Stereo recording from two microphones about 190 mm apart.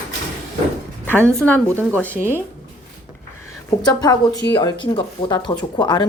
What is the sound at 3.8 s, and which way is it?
Speech, 20° left (ahead or behind).